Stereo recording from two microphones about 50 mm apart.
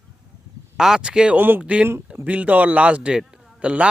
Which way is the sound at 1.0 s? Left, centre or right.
Right.